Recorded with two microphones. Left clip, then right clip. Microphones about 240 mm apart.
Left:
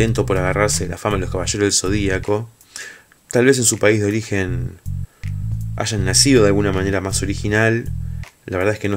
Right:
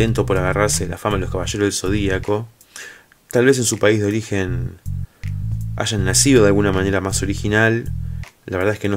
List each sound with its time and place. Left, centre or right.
0.0 s speech: centre